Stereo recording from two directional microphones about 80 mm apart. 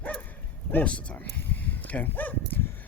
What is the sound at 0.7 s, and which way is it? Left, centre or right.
Dog, centre.